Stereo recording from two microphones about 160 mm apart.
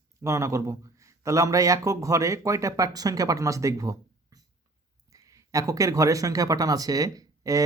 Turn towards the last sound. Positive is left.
turn(degrees=-20)  # may be behind; listen again after turning